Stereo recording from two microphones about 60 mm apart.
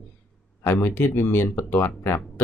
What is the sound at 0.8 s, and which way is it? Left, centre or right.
Speech, left.